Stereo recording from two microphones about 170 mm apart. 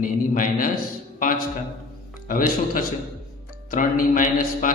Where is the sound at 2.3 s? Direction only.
55° left (ahead or behind).